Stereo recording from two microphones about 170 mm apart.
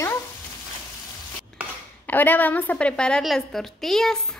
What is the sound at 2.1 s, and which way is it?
A woman's voice, 10° left (ahead or behind).